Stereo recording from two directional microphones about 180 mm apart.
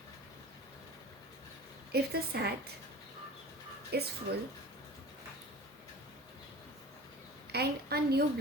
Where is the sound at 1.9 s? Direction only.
60° right (ahead or behind).